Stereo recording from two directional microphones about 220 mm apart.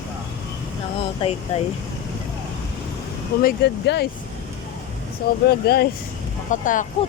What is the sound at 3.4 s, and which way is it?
Speech, 45° left (ahead or behind).